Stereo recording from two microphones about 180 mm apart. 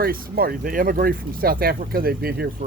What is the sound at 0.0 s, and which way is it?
Speech, 55° right (ahead or behind).